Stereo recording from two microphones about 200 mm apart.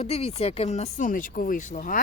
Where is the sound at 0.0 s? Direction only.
30° left (ahead or behind).